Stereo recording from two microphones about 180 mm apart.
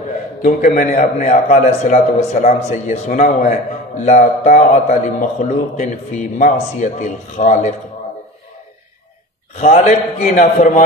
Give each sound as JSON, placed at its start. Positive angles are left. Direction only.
{"t": 0.4, "sound": "a man's voice", "side_deg": 40}
{"t": 9.6, "sound": "a man's voice", "side_deg": 40}